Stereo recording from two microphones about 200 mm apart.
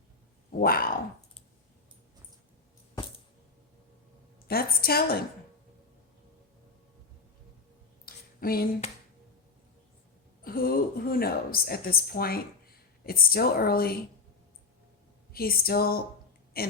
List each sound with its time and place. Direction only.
0.5 s dog: 45° left (ahead or behind)
4.4 s a woman's voice: 50° left (ahead or behind)
8.0 s a sound: 45° left (ahead or behind)
10.4 s a woman's voice: 45° left (ahead or behind)
15.3 s a woman's voice: 50° left (ahead or behind)